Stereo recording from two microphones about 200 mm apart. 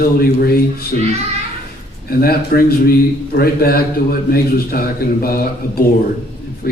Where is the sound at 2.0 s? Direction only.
50° left (ahead or behind).